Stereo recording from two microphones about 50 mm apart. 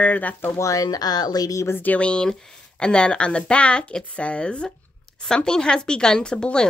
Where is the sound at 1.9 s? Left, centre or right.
Left.